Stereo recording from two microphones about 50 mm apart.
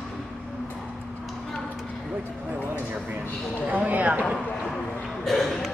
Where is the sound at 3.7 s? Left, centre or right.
Right.